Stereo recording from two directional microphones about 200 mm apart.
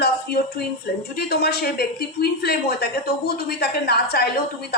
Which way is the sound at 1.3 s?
55° left (ahead or behind).